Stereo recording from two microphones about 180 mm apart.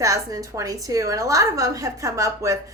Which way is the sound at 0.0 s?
20° right (ahead or behind).